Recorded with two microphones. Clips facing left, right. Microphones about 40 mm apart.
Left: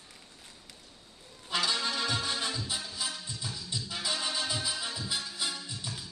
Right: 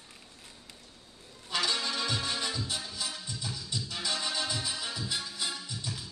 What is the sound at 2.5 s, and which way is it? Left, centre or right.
Music, centre.